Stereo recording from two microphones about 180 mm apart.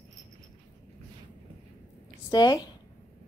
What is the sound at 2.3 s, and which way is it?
Dog, 25° left (ahead or behind).